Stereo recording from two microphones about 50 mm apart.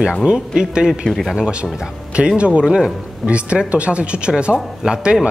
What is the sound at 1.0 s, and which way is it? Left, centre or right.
Speech, centre.